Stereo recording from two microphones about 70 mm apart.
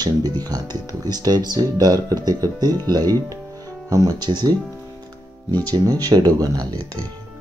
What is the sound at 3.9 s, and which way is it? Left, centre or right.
Speech, right.